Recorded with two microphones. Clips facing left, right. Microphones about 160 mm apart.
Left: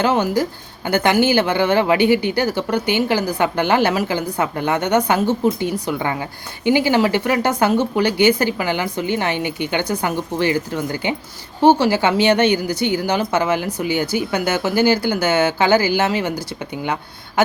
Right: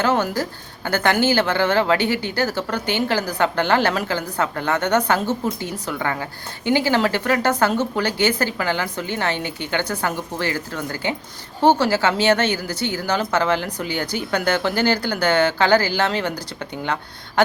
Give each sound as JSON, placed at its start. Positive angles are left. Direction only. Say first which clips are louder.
{"t": 0.0, "sound": "speech", "louder": "left 3 dB", "side_deg": 15}